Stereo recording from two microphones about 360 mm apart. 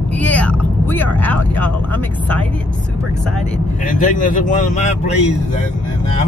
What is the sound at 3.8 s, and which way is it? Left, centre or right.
Speech, left.